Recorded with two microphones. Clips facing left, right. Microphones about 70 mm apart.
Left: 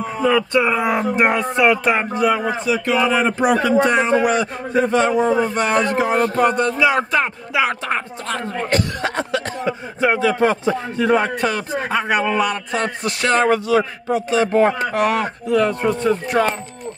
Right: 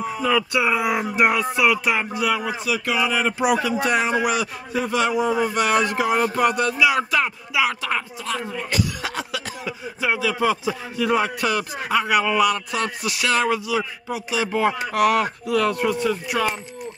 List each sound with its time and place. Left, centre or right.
1.0 s speech: left
4.0 s a man's voice: centre
4.3 s speech: left
6.1 s a man's voice: centre
6.4 s speech: left